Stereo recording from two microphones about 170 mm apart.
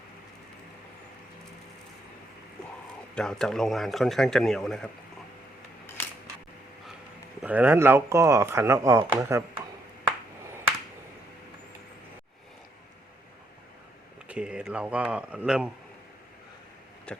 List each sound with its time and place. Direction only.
3.2 s speech: 5° left (ahead or behind)
7.4 s speech: 10° right (ahead or behind)
14.3 s speech: 5° right (ahead or behind)
17.1 s a sound: 5° left (ahead or behind)